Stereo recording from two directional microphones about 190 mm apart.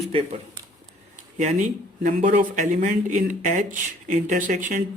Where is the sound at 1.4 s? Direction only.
40° right (ahead or behind).